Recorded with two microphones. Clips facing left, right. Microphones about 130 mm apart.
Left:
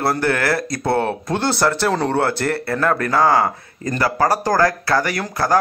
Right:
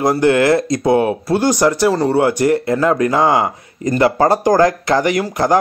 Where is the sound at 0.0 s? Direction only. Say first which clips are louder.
Right 6 dB; 15° right (ahead or behind).